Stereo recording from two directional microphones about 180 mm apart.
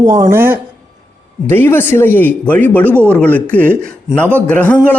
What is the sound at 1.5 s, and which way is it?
A man's voice, 10° left (ahead or behind).